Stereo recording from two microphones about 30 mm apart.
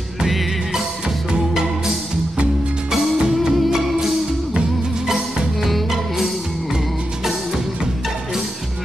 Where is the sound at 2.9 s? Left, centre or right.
Right.